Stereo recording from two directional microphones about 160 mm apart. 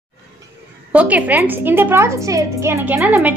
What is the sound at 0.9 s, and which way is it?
A woman's voice, 10° right (ahead or behind).